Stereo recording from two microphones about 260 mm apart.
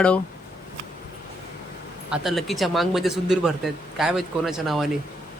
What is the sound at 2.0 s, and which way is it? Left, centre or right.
Speech, centre.